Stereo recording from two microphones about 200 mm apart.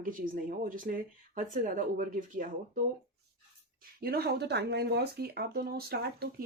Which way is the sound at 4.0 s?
50° right (ahead or behind).